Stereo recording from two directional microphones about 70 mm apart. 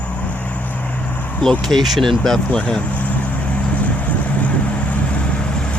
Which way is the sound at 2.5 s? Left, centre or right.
Centre.